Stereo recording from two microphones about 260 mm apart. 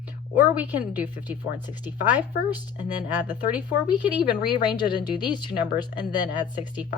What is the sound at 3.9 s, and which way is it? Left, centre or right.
A woman's voice, centre.